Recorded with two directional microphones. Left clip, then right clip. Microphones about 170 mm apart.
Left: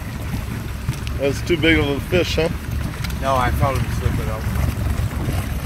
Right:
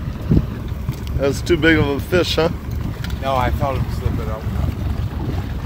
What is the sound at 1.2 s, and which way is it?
Speech, 25° right (ahead or behind).